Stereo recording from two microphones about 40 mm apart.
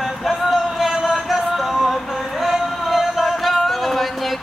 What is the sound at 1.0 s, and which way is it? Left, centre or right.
Music, centre.